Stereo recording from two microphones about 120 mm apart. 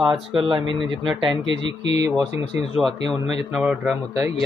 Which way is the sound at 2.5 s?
20° right (ahead or behind).